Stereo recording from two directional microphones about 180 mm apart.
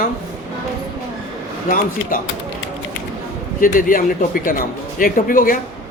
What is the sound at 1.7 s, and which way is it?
Speech, 50° left (ahead or behind).